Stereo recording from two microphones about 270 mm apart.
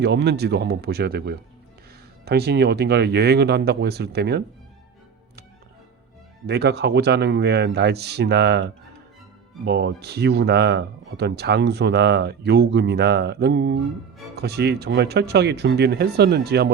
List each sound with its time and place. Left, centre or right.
0.0 s speech: right
6.5 s speech: right